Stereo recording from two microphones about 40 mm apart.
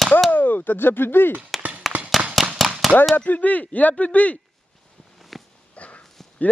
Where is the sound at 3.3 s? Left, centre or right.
Left.